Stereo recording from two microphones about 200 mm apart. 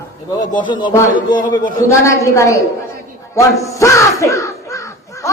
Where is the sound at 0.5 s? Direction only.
25° left (ahead or behind).